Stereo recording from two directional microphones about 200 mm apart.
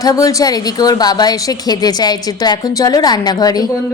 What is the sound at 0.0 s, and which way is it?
A woman's voice, 15° left (ahead or behind).